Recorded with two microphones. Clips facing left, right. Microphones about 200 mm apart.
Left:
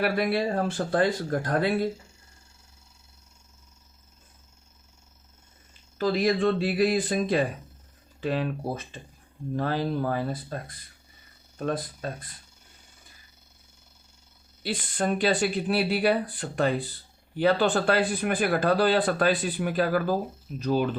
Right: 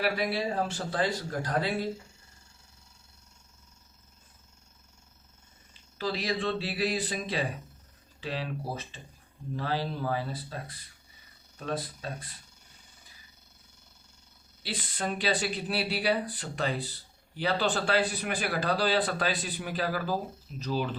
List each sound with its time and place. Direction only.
0.0 s speech: 55° left (ahead or behind)
6.0 s speech: 50° left (ahead or behind)
14.6 s speech: 50° left (ahead or behind)